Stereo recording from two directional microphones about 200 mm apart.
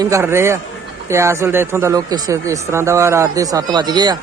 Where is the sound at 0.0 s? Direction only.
15° right (ahead or behind).